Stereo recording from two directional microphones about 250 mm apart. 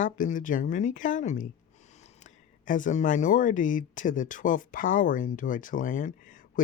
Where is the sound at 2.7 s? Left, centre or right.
Left.